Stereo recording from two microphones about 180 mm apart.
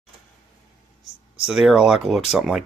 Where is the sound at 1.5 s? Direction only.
Centre (ahead or behind).